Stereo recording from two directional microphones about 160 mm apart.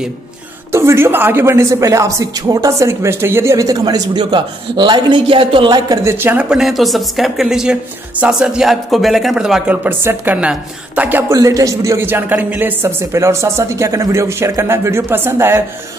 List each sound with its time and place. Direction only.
0.7 s speech: 15° right (ahead or behind)